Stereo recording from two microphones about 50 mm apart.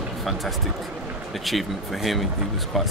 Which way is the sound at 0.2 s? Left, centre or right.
Centre.